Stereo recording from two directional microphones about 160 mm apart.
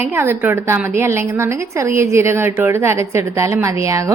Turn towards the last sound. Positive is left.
turn(degrees=-20)  # may be behind; listen again after turning